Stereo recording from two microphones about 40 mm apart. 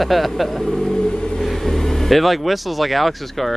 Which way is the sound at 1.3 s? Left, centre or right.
Centre.